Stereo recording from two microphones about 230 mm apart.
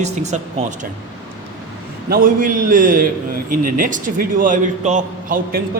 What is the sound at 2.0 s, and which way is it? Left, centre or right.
A man's voice, right.